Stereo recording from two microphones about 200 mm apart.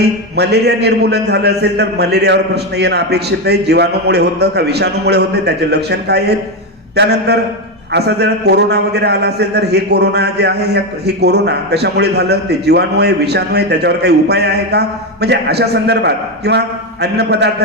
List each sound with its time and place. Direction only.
0.0 s a man's voice: 55° right (ahead or behind)